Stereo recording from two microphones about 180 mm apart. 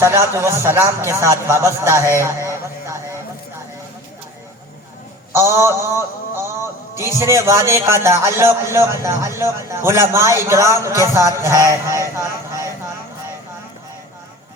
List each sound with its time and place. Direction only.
0.0 s a man's voice: 15° right (ahead or behind)
2.5 s a sound: 15° right (ahead or behind)
5.3 s a man's voice: 15° right (ahead or behind)